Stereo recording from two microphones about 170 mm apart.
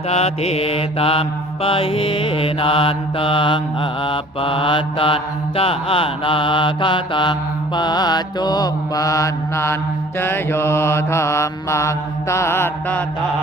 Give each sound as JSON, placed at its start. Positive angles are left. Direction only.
{"t": 0.1, "sound": "mantra", "side_deg": 40}